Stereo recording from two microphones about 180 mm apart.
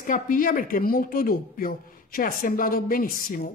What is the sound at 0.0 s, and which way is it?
A woman's voice, 50° left (ahead or behind).